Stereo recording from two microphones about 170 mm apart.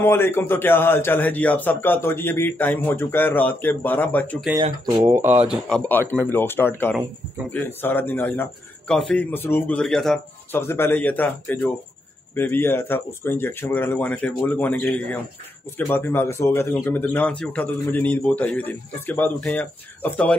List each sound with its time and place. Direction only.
0.0 s speech: 15° left (ahead or behind)
4.6 s speech: 20° right (ahead or behind)
5.5 s speech: 5° left (ahead or behind)
10.5 s speech: 15° left (ahead or behind)